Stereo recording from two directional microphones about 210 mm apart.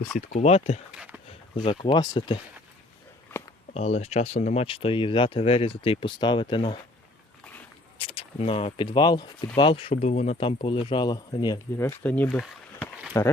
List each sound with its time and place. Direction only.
0.3 s speech: 30° left (ahead or behind)
0.9 s a sound: 5° right (ahead or behind)
1.5 s speech: 25° left (ahead or behind)
3.3 s a sound: 10° left (ahead or behind)
3.8 s speech: 30° left (ahead or behind)
7.9 s speech: 25° left (ahead or behind)
12.0 s speech: 5° left (ahead or behind)